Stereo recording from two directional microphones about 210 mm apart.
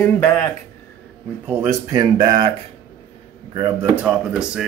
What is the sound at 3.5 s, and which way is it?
Speech, 15° right (ahead or behind).